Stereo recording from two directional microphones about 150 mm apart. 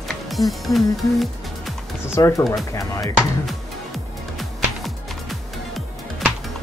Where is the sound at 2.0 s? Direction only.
20° left (ahead or behind).